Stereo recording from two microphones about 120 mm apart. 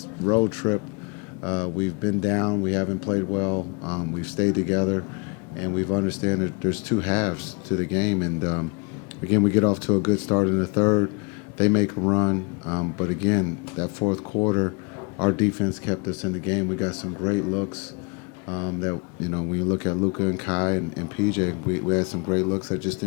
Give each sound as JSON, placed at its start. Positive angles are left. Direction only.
{"t": 0.3, "sound": "speech", "side_deg": 25}